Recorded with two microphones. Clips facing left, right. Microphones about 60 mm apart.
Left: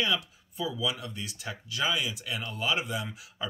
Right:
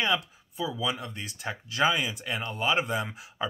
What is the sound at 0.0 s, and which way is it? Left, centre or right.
Speech, right.